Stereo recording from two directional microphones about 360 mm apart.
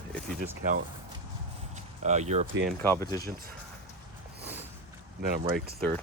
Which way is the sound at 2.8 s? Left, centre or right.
Centre.